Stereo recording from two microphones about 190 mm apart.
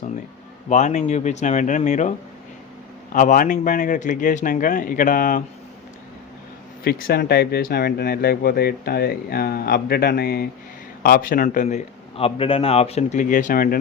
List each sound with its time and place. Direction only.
0.7 s a man's voice: 40° left (ahead or behind)
6.8 s a man's voice: 55° left (ahead or behind)